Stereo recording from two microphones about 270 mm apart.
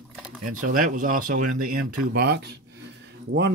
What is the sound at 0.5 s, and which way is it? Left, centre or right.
Speech, right.